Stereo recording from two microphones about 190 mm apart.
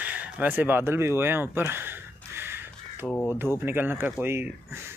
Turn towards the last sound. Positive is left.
turn(degrees=-10)  # may be behind; listen again after turning